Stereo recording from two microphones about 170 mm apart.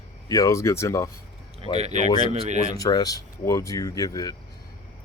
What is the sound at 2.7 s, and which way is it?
Speech, 20° left (ahead or behind).